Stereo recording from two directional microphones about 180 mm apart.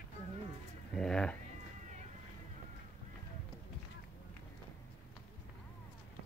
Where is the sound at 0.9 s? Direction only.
5° left (ahead or behind).